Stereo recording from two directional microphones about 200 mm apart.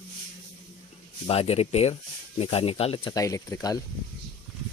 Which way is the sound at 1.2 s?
30° left (ahead or behind).